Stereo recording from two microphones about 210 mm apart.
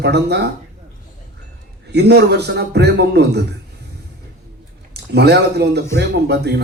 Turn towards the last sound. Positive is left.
turn(degrees=-50)  # may be behind; listen again after turning